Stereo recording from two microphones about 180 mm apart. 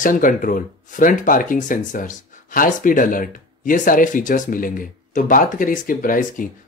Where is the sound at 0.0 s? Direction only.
50° left (ahead or behind).